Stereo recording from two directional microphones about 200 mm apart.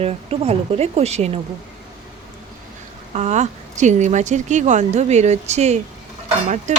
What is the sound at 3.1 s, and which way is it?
Speech, 35° right (ahead or behind).